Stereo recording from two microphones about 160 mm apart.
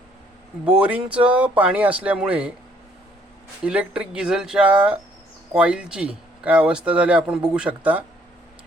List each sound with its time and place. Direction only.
0.8 s speech: 10° right (ahead or behind)
3.6 s speech: 5° right (ahead or behind)